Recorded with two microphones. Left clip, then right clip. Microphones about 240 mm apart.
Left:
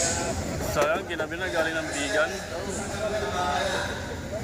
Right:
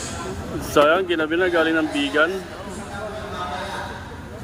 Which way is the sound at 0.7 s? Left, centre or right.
Right.